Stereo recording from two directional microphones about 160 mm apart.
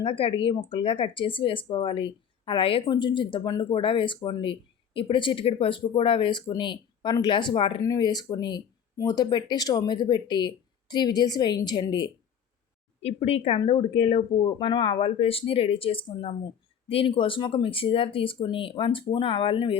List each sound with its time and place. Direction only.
0.0 s speech: 35° left (ahead or behind)
13.0 s speech: 40° left (ahead or behind)